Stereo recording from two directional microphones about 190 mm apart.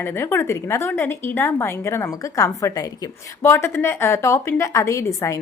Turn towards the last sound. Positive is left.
turn(degrees=15)  # may be behind; listen again after turning